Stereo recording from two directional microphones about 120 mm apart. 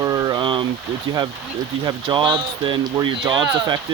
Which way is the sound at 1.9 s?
40° right (ahead or behind).